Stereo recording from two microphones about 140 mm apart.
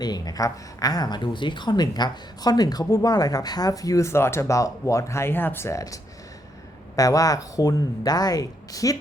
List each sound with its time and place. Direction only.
0.0 s speech: 30° left (ahead or behind)